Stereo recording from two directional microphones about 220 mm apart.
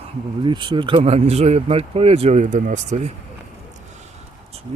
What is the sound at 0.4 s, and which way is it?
Speech, 20° right (ahead or behind).